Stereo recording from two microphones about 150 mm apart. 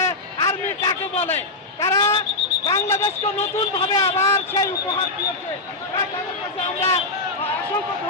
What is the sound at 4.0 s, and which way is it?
Speech, 15° left (ahead or behind).